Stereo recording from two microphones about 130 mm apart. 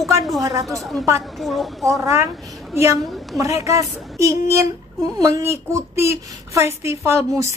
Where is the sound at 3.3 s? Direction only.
25° right (ahead or behind).